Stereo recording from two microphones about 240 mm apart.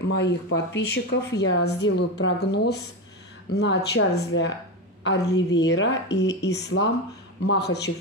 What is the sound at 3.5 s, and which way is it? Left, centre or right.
Speech, left.